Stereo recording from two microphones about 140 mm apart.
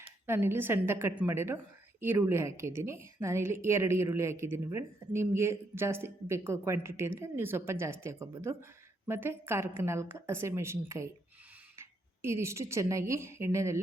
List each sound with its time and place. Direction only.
0.3 s a woman's voice: 15° right (ahead or behind)